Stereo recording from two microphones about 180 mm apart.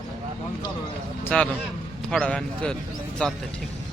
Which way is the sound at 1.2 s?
5° left (ahead or behind).